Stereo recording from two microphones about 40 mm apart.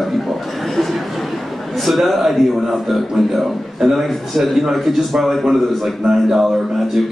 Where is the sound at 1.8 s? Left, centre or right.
Centre.